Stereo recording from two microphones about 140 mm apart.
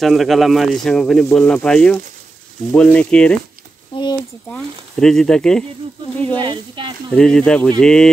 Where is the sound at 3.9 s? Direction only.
40° left (ahead or behind).